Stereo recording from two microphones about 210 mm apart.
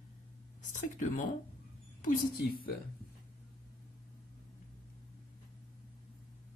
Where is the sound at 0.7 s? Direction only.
35° left (ahead or behind).